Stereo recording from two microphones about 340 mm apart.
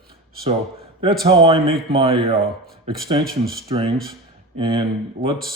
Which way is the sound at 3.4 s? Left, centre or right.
Centre.